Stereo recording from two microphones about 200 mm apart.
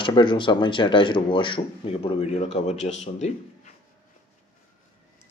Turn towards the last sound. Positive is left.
turn(degrees=35)  # may be behind; listen again after turning